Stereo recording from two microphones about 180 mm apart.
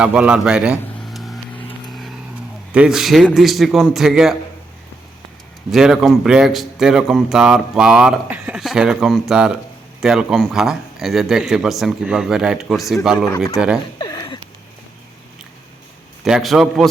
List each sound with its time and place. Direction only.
0.0 s a man's voice: 5° right (ahead or behind)
1.9 s vehicle: centre (ahead or behind)
2.7 s speech: 5° right (ahead or behind)
5.7 s speech: 5° right (ahead or behind)
14.0 s a sound: 20° left (ahead or behind)
16.2 s speech: centre (ahead or behind)